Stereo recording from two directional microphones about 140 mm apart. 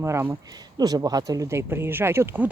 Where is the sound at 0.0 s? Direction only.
20° right (ahead or behind).